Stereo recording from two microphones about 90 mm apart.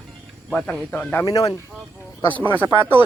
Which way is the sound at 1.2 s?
45° left (ahead or behind).